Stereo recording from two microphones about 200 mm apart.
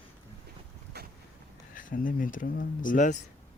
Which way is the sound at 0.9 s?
55° right (ahead or behind).